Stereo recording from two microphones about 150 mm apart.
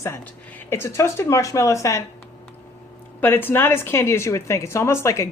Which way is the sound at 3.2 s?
15° left (ahead or behind).